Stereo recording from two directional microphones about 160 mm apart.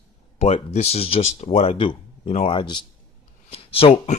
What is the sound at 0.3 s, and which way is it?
Speech, 45° left (ahead or behind).